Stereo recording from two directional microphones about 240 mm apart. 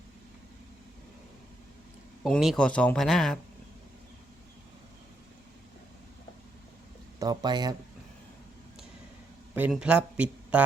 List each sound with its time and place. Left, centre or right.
2.2 s speech: centre
7.2 s speech: centre
9.6 s speech: centre